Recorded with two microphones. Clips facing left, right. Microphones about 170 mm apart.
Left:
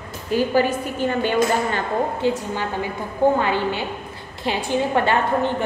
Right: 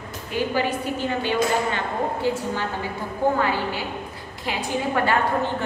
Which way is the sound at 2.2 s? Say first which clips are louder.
Left 2 dB; 20° left (ahead or behind).